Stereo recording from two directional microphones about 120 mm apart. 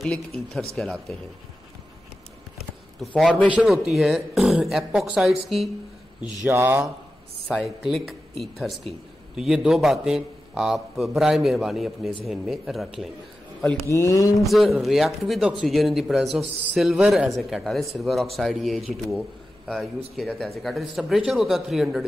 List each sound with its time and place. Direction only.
0.0 s a man's voice: 5° left (ahead or behind)
3.2 s a man's voice: 10° left (ahead or behind)
3.4 s a man's voice: 5° right (ahead or behind)
6.4 s speech: 20° right (ahead or behind)
7.5 s a man's voice: 5° right (ahead or behind)
13.8 s speech: 25° left (ahead or behind)
14.4 s a man's voice: centre (ahead or behind)
20.2 s a man's voice: 5° left (ahead or behind)